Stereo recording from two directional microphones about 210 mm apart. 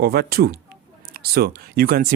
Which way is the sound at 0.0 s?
45° right (ahead or behind).